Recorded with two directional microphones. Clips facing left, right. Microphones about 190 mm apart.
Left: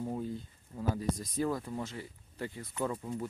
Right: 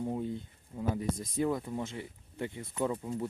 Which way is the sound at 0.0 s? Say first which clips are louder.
Right 2 dB; 20° right (ahead or behind).